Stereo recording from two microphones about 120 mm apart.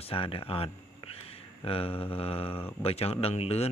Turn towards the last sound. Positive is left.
turn(degrees=60)  # may be behind; listen again after turning